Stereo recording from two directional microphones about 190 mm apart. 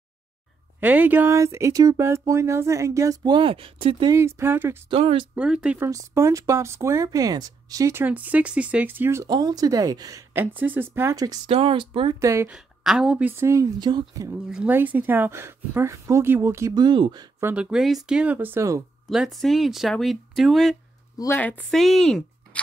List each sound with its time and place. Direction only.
0.7 s speech: 10° right (ahead or behind); by 4.1 s 30° right (ahead or behind)
4.1 s speech: 15° right (ahead or behind)
4.8 s speech: 30° right (ahead or behind)
5.3 s speech: 5° right (ahead or behind); by 12.2 s 25° right (ahead or behind)
12.2 s speech: 15° right (ahead or behind)
12.5 s speech: 5° right (ahead or behind); by 14.3 s 20° right (ahead or behind)
14.3 s speech: 5° right (ahead or behind); by 17.5 s 20° right (ahead or behind)
17.5 s speech: 5° right (ahead or behind)
19.0 s speech: centre (ahead or behind)
21.2 s speech: 10° left (ahead or behind)